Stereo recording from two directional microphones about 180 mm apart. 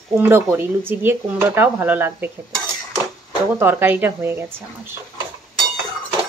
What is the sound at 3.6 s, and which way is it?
Speech, 10° right (ahead or behind).